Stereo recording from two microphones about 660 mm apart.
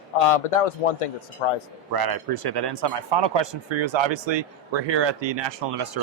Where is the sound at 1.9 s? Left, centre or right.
Right.